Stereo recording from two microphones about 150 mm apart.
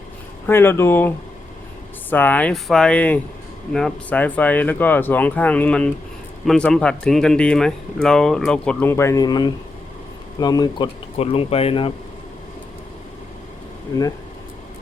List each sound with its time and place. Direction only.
0.4 s speech: 15° left (ahead or behind)
8.9 s speech: 20° left (ahead or behind)
11.2 s speech: 40° left (ahead or behind)